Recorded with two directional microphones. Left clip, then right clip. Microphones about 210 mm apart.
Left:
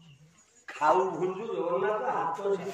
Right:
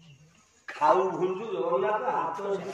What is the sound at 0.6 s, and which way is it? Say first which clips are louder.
Speech: right 2 dB; centre (ahead or behind).